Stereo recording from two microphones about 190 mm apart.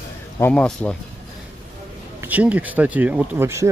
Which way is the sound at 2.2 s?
10° right (ahead or behind).